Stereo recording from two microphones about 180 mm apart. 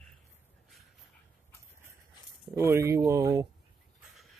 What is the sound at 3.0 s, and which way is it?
Speech, 20° right (ahead or behind).